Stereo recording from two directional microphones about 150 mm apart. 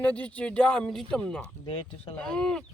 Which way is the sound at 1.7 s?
35° left (ahead or behind).